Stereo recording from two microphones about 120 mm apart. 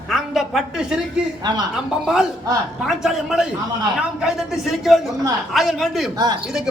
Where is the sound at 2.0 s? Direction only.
5° right (ahead or behind).